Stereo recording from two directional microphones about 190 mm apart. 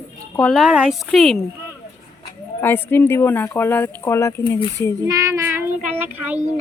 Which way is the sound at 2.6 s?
10° left (ahead or behind).